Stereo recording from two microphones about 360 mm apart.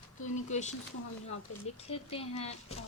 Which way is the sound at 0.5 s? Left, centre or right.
Centre.